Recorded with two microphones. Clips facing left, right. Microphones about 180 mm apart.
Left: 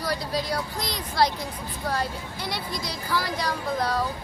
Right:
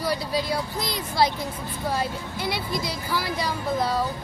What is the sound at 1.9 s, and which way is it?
Speech, 5° right (ahead or behind).